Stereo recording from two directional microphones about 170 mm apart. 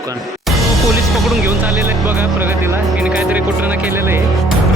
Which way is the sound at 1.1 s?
Centre (ahead or behind).